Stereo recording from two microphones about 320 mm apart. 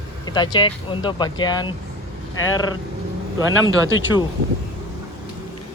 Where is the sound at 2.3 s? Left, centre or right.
Left.